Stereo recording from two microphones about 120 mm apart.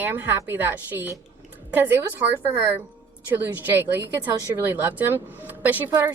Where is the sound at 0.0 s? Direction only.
15° right (ahead or behind).